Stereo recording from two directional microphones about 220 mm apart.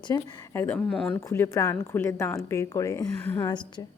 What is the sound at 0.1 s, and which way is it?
Speech, 10° left (ahead or behind).